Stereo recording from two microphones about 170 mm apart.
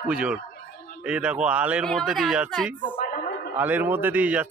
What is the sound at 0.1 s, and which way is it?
Speech, 5° right (ahead or behind).